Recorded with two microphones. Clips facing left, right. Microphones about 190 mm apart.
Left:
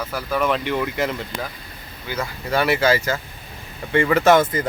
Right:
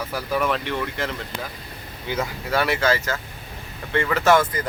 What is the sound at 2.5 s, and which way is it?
Speech, centre (ahead or behind).